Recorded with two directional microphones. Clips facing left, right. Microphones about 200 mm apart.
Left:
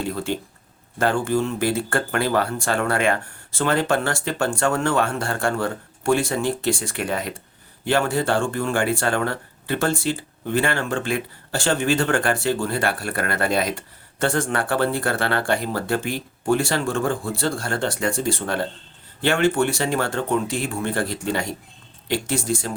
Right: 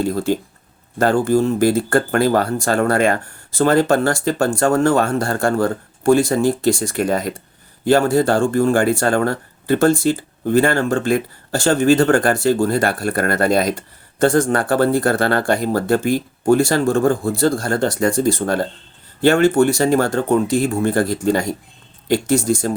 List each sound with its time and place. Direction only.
0.0 s speech: 40° right (ahead or behind)